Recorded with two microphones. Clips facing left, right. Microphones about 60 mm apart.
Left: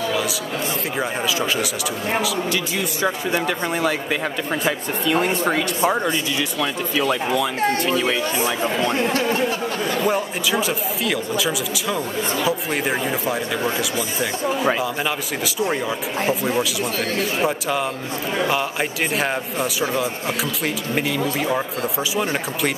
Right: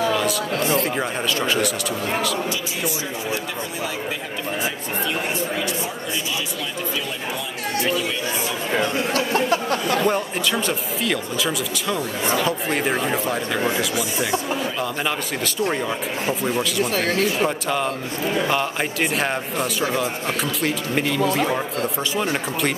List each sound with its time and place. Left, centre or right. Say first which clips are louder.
0.9 s speech: left 1 dB; centre
2.5 s speech: left 2 dB; left
4.6 s speech: left 4 dB; left
7.0 s speech: left 8 dB; left
10.0 s speech: even; centre
14.8 s speech: left 1 dB; centre